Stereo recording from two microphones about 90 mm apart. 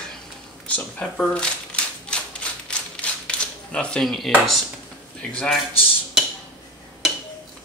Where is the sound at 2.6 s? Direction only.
10° left (ahead or behind).